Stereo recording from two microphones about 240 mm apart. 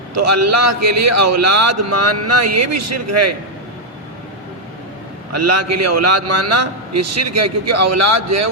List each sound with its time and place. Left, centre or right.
0.2 s a man's voice: right
5.3 s a man's voice: right